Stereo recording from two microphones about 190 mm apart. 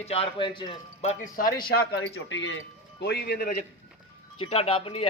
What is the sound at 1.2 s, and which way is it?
Speech, 45° left (ahead or behind).